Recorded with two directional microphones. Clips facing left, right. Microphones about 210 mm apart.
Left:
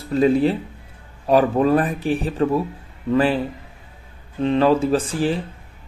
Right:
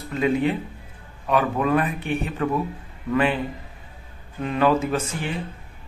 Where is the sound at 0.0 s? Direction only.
35° left (ahead or behind).